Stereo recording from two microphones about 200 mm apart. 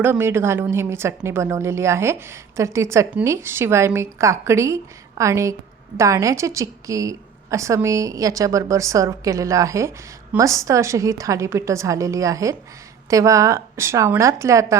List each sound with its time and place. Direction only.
0.0 s a woman's voice: 10° right (ahead or behind)